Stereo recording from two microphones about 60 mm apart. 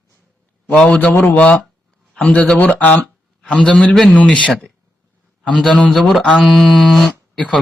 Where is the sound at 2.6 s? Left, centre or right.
Left.